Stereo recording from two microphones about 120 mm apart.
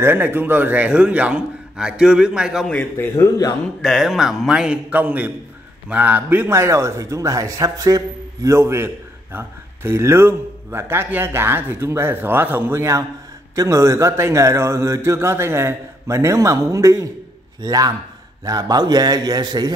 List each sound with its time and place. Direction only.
0.0 s a man's voice: 15° right (ahead or behind)
2.7 s a man's voice: 15° left (ahead or behind)
3.8 s a man's voice: centre (ahead or behind); by 19.7 s 35° right (ahead or behind)